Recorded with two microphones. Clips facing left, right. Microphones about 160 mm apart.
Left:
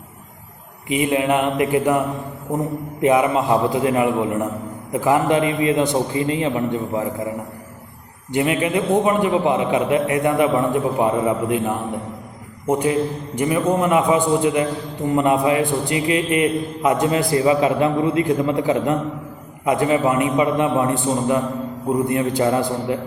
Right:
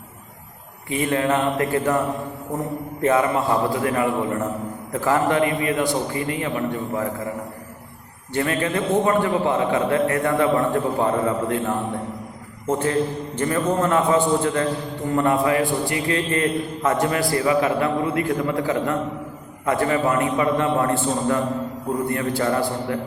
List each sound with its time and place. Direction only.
0.9 s a man's voice: 15° left (ahead or behind)
3.0 s a man's voice: 15° left (ahead or behind)
8.3 s a man's voice: 15° left (ahead or behind)